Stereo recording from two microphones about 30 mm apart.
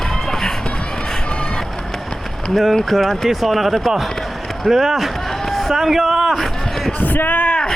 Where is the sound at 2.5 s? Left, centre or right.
Centre.